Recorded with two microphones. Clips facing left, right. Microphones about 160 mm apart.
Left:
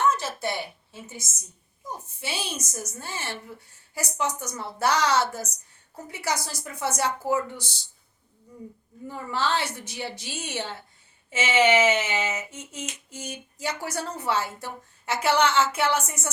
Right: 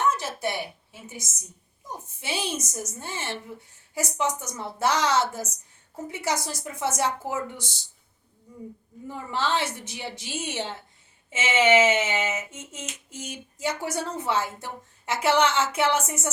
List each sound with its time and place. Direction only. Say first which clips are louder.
0.2 s speech: even; 15° right (ahead or behind)
2.2 s a woman's voice: right 3 dB; 20° right (ahead or behind)
9.0 s a woman's voice: even; 20° right (ahead or behind)